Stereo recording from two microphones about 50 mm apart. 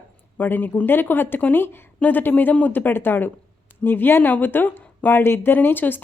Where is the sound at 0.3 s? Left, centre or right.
Left.